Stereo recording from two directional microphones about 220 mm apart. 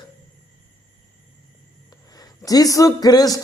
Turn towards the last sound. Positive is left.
turn(degrees=15)  # may be behind; listen again after turning